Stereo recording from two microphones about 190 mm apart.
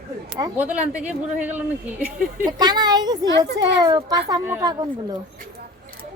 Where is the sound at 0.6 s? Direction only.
10° right (ahead or behind).